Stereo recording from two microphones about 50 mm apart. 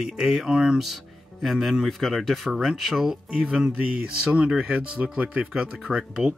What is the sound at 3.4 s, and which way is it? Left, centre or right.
Speech, centre.